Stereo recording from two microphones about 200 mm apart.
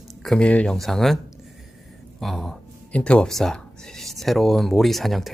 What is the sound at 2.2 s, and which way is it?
Speech, centre (ahead or behind).